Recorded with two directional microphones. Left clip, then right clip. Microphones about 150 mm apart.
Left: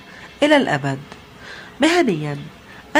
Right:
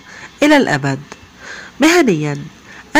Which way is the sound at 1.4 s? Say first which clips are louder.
Right 5 dB; 30° right (ahead or behind).